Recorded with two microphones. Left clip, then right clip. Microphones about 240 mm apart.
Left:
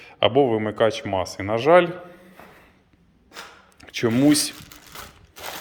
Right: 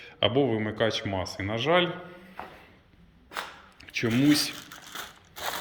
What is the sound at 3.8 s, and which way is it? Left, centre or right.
Speech, centre.